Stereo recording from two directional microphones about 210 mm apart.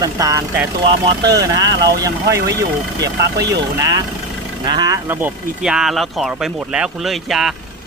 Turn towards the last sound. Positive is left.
turn(degrees=0)  # may be behind; listen again after turning